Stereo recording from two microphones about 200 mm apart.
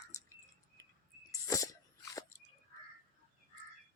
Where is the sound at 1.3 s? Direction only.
15° left (ahead or behind).